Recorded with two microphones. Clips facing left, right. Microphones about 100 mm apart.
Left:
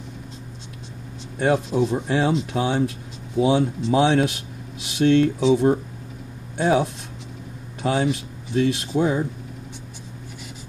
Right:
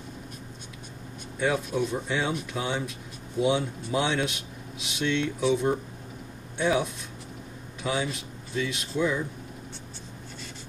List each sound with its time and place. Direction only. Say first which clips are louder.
1.8 s speech: left 7 dB; 75° left (ahead or behind)
3.3 s speech: left 6 dB; 80° left
6.6 s speech: left 6 dB; 65° left (ahead or behind)